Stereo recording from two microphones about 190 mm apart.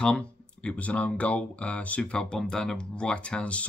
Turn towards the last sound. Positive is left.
turn(degrees=5)  # may be behind; listen again after turning